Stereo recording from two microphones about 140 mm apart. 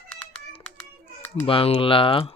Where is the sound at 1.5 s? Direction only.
40° left (ahead or behind).